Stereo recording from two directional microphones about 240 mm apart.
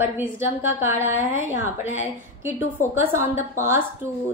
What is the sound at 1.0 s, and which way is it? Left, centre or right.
Speech, left.